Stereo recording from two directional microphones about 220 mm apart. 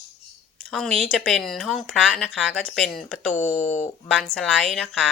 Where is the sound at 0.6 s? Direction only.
Centre (ahead or behind).